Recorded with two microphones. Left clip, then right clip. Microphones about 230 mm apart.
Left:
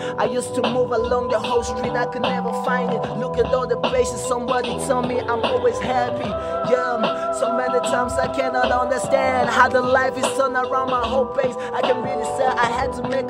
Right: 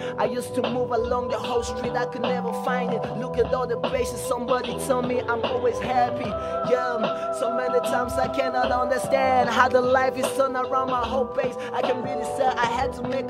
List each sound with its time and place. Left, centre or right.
0.9 s speech: centre
3.9 s a woman's voice: centre
5.4 s speech: left
8.2 s a woman's voice: centre
11.4 s speech: left
12.4 s speech: centre